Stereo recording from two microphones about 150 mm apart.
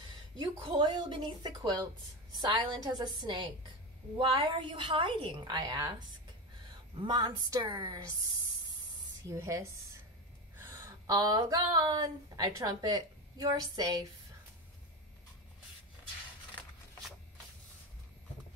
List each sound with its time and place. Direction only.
0.6 s a woman's voice: 30° right (ahead or behind)
7.0 s a woman's voice: 30° right (ahead or behind)
9.3 s speech: 20° right (ahead or behind)